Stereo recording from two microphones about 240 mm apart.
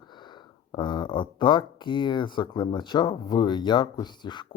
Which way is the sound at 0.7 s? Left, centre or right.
Centre.